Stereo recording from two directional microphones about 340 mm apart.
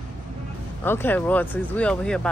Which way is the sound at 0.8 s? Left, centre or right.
Centre.